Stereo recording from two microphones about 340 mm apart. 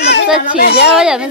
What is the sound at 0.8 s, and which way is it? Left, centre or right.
Speech, centre.